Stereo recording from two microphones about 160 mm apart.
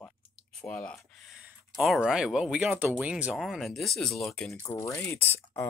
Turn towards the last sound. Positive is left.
turn(degrees=15)  # may be behind; listen again after turning